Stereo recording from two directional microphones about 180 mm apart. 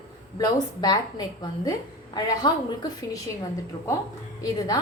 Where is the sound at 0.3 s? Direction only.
20° left (ahead or behind).